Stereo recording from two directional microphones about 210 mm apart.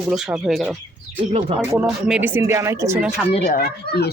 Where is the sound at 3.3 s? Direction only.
35° left (ahead or behind).